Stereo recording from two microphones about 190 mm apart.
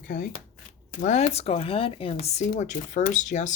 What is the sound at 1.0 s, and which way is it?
Speech, 40° left (ahead or behind).